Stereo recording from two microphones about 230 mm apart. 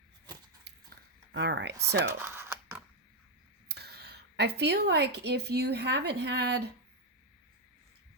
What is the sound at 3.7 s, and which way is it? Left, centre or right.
Speech, right.